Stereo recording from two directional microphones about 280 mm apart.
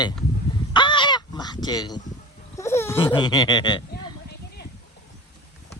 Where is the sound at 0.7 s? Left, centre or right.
Centre.